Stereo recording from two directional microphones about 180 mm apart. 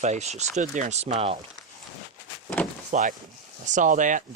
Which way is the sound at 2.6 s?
10° left (ahead or behind).